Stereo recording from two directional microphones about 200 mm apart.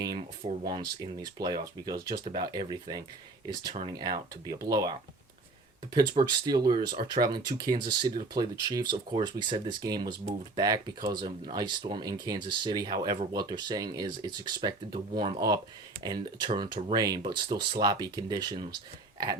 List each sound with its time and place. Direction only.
0.0 s speech: 20° right (ahead or behind)